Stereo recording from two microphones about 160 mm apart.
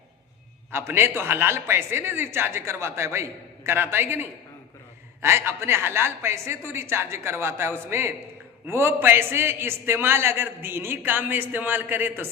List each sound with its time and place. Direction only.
0.7 s a man's voice: 15° right (ahead or behind)